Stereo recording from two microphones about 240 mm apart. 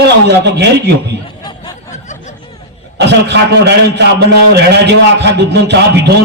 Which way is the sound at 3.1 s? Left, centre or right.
Right.